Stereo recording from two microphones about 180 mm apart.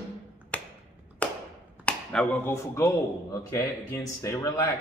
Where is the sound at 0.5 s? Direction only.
10° left (ahead or behind).